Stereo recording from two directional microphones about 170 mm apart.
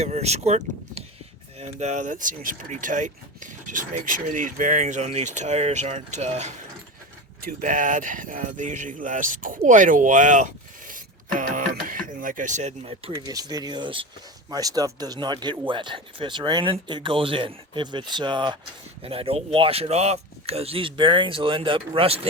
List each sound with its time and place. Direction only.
0.0 s speech: 40° right (ahead or behind)
13.1 s speech: 20° right (ahead or behind)